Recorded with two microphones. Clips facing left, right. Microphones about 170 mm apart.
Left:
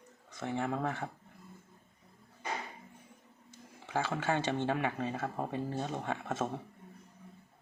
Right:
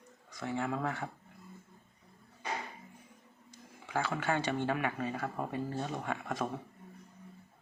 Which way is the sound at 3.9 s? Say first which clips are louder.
Even; 25° left (ahead or behind).